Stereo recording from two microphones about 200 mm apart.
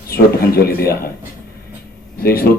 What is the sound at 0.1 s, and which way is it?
Speech, 50° left (ahead or behind).